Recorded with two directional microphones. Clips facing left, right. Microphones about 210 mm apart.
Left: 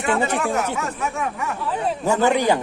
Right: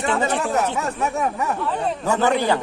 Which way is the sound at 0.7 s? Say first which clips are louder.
Right 3 dB; 35° right (ahead or behind).